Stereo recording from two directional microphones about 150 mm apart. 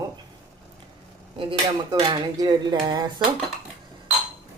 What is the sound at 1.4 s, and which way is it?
Speech, 30° right (ahead or behind).